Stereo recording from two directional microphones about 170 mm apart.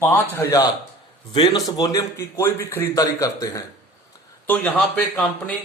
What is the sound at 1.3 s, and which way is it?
A man's voice, 30° left (ahead or behind).